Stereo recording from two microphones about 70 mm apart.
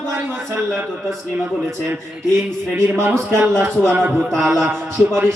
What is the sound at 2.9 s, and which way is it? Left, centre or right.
Music, right.